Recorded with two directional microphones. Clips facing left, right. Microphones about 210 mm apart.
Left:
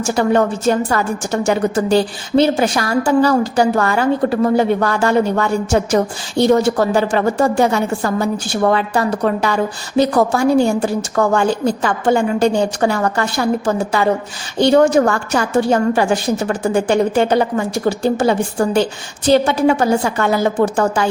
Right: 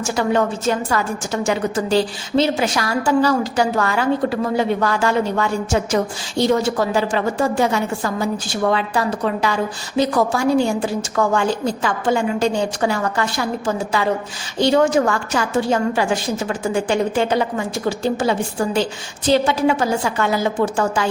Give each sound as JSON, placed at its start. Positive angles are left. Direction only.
{"t": 0.2, "sound": "a woman's voice", "side_deg": 50}
{"t": 1.7, "sound": "a woman's voice", "side_deg": 55}
{"t": 3.6, "sound": "a woman's voice", "side_deg": 45}
{"t": 15.4, "sound": "a woman's voice", "side_deg": 50}